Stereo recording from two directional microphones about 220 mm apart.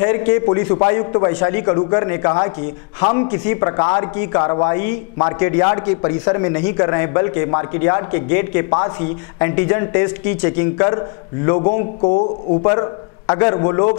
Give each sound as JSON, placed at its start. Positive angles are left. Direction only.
{"t": 0.0, "sound": "a man's voice", "side_deg": 15}
{"t": 12.6, "sound": "a man's voice", "side_deg": 20}